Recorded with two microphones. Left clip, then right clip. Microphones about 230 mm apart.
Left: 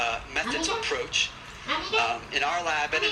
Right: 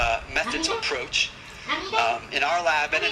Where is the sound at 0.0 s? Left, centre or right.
Right.